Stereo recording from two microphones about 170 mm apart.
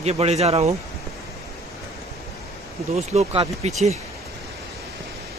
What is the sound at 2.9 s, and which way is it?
Speech, 40° right (ahead or behind).